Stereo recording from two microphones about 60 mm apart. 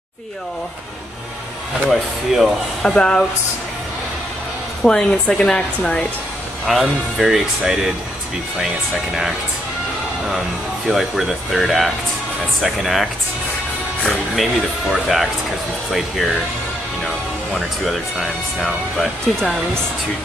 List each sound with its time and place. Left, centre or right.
1.9 s speech: centre
2.8 s speech: centre
4.8 s speech: centre
6.6 s speech: centre
10.9 s speech: centre
17.8 s speech: centre